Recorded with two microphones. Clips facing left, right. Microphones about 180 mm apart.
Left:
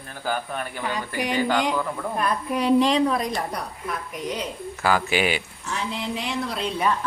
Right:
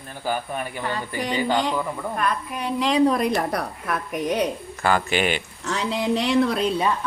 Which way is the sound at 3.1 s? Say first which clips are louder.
Right 4 dB; 65° right (ahead or behind).